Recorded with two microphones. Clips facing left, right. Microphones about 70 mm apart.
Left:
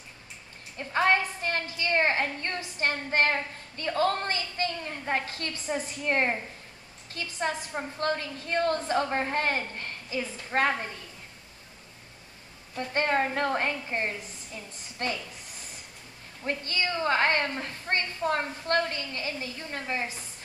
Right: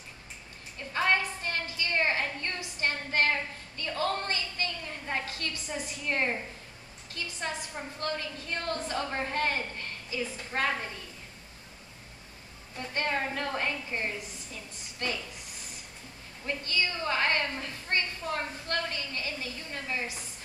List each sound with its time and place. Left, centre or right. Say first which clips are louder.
0.7 s a sound: left 3 dB; left
7.3 s a woman's voice: left 6 dB; left
12.7 s a woman's voice: left 5 dB; left
16.4 s a woman's voice: left 2 dB; left